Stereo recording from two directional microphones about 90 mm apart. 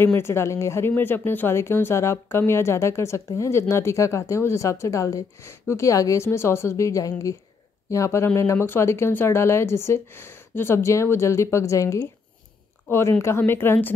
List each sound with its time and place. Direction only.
0.0 s speech: 25° left (ahead or behind)